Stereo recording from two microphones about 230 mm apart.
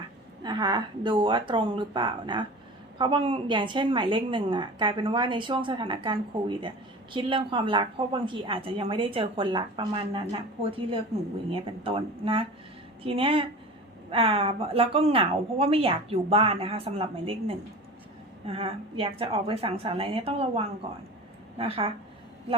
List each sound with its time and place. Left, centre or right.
0.4 s a woman's voice: centre
18.4 s a woman's voice: right